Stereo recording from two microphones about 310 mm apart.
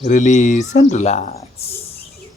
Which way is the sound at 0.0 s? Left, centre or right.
Left.